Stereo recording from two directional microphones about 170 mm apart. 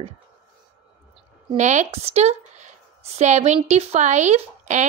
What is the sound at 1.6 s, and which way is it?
A woman's voice, 45° right (ahead or behind).